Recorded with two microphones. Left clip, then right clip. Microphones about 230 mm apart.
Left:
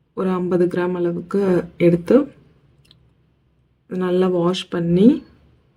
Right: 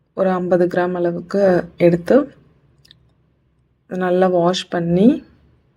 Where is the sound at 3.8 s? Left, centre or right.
Right.